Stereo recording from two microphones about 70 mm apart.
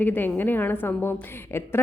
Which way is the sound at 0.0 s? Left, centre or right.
Left.